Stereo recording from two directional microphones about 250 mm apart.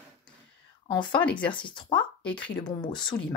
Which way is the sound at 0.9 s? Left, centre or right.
Centre.